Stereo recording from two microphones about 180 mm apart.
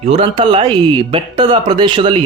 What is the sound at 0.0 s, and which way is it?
Speech, 35° right (ahead or behind).